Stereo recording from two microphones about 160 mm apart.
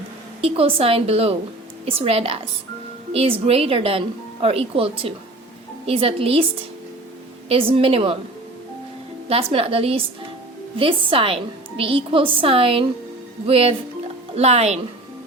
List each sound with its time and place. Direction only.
0.4 s speech: 35° right (ahead or behind)
7.4 s speech: 35° right (ahead or behind)
9.3 s speech: 35° right (ahead or behind)